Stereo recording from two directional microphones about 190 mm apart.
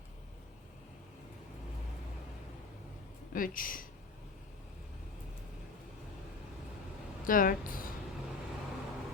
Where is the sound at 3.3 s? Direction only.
45° left (ahead or behind).